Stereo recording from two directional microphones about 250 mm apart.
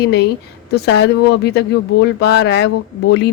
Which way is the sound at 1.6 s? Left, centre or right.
Left.